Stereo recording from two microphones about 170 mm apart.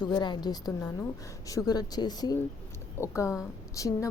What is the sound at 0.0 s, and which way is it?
A woman's voice, 25° left (ahead or behind).